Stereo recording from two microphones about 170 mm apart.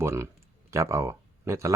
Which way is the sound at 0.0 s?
15° right (ahead or behind).